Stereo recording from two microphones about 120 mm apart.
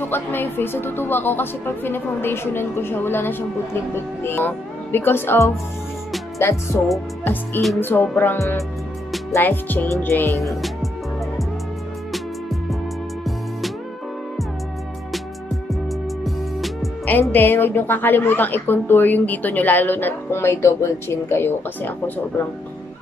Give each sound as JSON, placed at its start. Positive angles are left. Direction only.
{"t": 0.0, "sound": "a woman's voice", "side_deg": 15}
{"t": 6.3, "sound": "music", "side_deg": 25}
{"t": 7.8, "sound": "a woman's voice", "side_deg": 15}
{"t": 10.4, "sound": "music", "side_deg": 0}
{"t": 12.1, "sound": "music", "side_deg": 0}
{"t": 15.7, "sound": "music", "side_deg": 0}
{"t": 17.0, "sound": "a woman's voice", "side_deg": 15}